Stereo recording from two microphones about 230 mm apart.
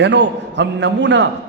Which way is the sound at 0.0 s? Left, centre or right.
Right.